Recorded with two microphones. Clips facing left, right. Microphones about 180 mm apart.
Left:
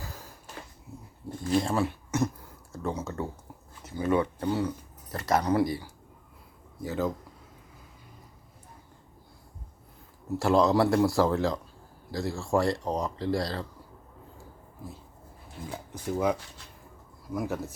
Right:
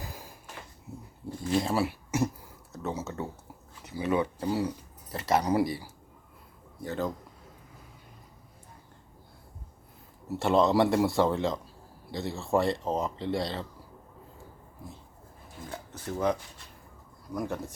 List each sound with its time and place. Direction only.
0.0 s a sound: 15° right (ahead or behind)
0.9 s a sound: 25° right (ahead or behind)
1.6 s speech: 10° right (ahead or behind)
5.1 s speech: 25° right (ahead or behind)
5.4 s speech: 10° right (ahead or behind)
6.8 s speech: 5° left (ahead or behind)
10.2 s speech: centre (ahead or behind)
15.7 s speech: 10° left (ahead or behind)